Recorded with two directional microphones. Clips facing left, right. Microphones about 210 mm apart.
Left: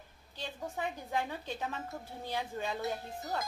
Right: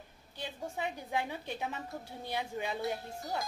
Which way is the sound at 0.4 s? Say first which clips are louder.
Even; 20° right (ahead or behind).